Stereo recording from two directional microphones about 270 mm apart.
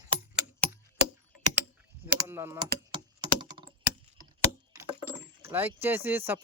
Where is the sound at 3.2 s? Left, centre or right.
Centre.